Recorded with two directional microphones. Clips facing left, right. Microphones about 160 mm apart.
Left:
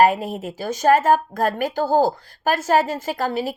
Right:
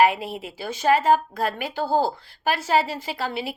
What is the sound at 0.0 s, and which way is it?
Speech, 45° left (ahead or behind).